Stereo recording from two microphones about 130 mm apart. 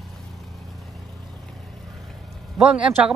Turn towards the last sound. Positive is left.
turn(degrees=-10)  # may be behind; listen again after turning